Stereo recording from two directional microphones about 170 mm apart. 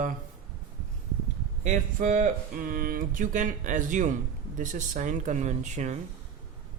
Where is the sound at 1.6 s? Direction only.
45° right (ahead or behind).